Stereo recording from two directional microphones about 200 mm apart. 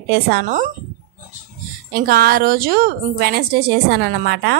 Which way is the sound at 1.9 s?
50° right (ahead or behind).